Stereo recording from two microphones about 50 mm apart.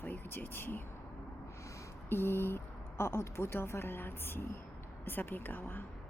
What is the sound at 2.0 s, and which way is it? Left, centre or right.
A woman's voice, left.